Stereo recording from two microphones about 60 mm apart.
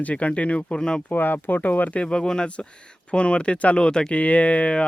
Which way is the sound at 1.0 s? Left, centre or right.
Left.